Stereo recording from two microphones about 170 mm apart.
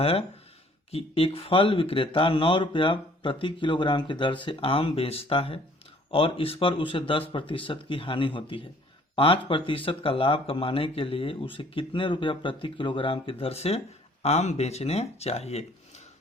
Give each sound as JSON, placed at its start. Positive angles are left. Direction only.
{"t": 0.0, "sound": "speech", "side_deg": 35}